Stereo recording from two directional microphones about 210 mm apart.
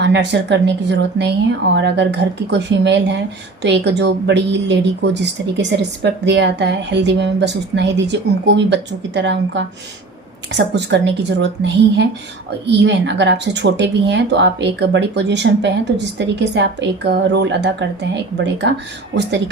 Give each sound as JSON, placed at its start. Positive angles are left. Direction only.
{"t": 0.0, "sound": "a woman's voice", "side_deg": -55}